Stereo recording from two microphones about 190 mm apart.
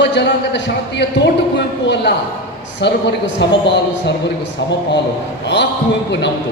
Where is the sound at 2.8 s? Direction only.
65° left (ahead or behind).